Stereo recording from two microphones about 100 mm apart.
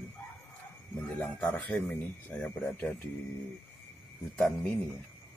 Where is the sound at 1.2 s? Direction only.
20° left (ahead or behind).